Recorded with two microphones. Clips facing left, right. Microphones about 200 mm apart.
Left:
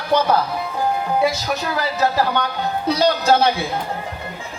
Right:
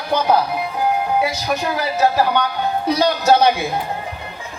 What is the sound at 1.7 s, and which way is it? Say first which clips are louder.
A man's voice: right 2 dB; 15° right (ahead or behind).